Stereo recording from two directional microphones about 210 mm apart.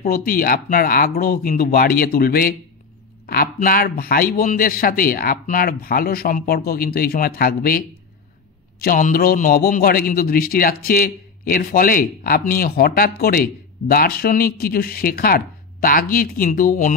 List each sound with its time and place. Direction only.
0.0 s a man's voice: 45° left (ahead or behind)
8.8 s a man's voice: 40° left (ahead or behind)